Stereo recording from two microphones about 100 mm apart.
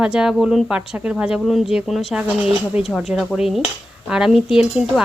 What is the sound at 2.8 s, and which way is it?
Speech, centre (ahead or behind).